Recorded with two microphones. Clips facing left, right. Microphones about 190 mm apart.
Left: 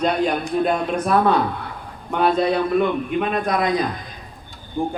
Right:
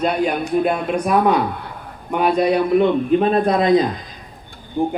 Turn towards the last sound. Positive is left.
turn(degrees=-15)  # may be behind; listen again after turning